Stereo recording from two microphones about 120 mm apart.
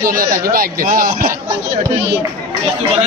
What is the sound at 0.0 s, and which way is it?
Speech, 30° right (ahead or behind).